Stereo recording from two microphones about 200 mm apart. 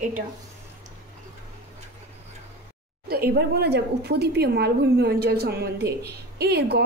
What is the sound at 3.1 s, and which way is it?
A woman's voice, 50° right (ahead or behind).